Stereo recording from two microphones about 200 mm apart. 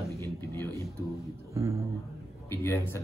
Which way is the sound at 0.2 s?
15° left (ahead or behind).